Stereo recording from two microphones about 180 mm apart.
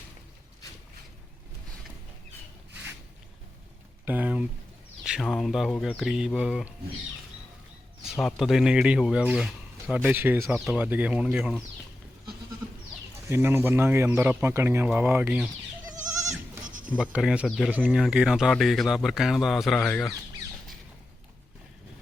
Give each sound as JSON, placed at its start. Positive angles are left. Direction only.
{"t": 4.0, "sound": "speech", "side_deg": -10}
{"t": 8.0, "sound": "speech", "side_deg": 0}
{"t": 13.2, "sound": "speech", "side_deg": -15}
{"t": 16.6, "sound": "bleat", "side_deg": -45}
{"t": 17.0, "sound": "speech", "side_deg": -5}